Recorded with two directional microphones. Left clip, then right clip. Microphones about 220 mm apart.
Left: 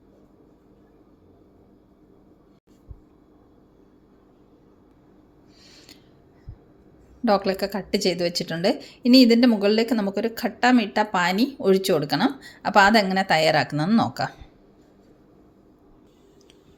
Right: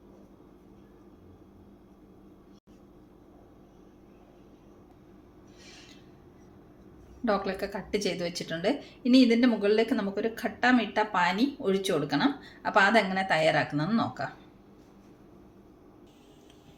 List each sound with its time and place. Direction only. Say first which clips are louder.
7.3 s a woman's voice: left 7 dB; 40° left (ahead or behind)